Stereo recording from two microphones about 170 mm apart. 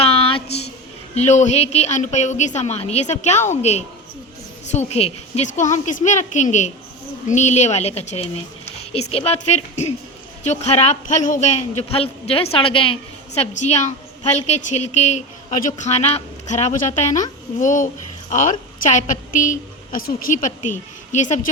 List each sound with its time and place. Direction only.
0.0 s a sound: 35° left (ahead or behind)
1.1 s a man's voice: 40° left (ahead or behind)
21.1 s a woman's voice: 45° left (ahead or behind)